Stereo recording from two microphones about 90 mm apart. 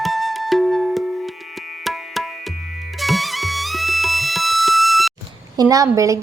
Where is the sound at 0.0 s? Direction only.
Centre (ahead or behind).